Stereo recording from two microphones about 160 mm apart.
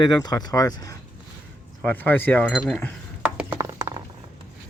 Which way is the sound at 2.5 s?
Centre (ahead or behind).